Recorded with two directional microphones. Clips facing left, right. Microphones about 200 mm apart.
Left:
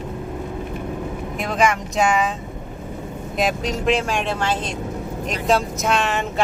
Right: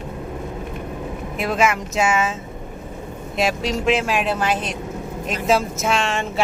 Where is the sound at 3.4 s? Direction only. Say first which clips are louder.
Right 1 dB; centre (ahead or behind).